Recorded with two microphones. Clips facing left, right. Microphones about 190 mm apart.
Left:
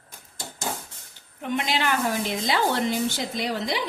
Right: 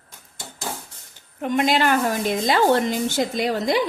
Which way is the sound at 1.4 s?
50° right (ahead or behind).